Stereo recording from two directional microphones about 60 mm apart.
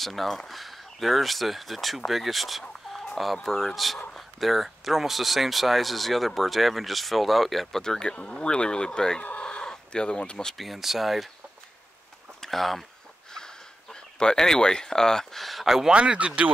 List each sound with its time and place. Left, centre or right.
0.0 s speech: centre
9.4 s chicken: centre
10.6 s speech: centre
12.4 s speech: centre
15.9 s speech: centre